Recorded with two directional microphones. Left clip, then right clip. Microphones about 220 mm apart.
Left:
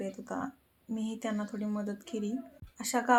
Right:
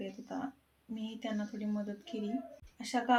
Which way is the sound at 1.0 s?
35° left (ahead or behind).